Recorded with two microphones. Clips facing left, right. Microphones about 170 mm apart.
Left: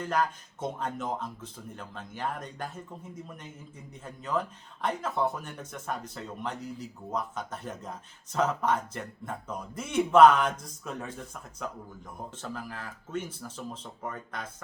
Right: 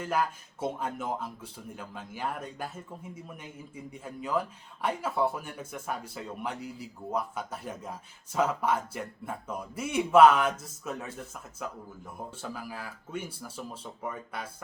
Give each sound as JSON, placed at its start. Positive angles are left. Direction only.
{"t": 0.0, "sound": "speech", "side_deg": -5}